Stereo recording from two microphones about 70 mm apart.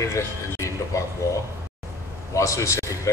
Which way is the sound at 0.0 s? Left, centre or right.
Left.